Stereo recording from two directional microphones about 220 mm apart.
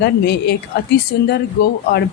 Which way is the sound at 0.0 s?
50° left (ahead or behind).